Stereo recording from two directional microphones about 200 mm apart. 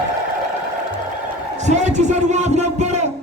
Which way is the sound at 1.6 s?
35° right (ahead or behind).